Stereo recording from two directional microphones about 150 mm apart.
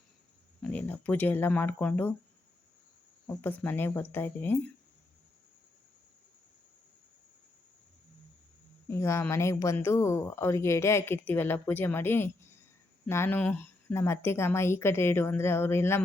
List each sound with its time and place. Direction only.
0.6 s speech: 10° left (ahead or behind)
3.2 s speech: 10° left (ahead or behind)
8.9 s speech: 15° left (ahead or behind)